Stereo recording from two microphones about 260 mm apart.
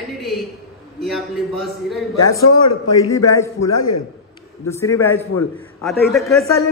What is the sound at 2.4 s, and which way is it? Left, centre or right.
Speech, left.